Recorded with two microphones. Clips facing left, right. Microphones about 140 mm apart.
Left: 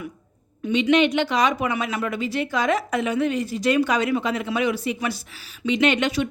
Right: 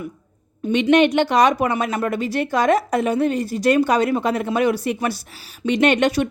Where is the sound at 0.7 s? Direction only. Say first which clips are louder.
Right 3 dB; 50° right (ahead or behind).